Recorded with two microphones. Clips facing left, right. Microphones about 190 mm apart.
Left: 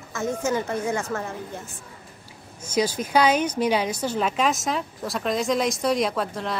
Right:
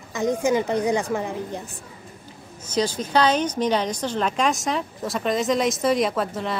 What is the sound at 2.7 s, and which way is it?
A woman's voice, 10° left (ahead or behind).